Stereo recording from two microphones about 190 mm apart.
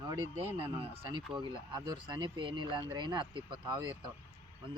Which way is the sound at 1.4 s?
25° right (ahead or behind).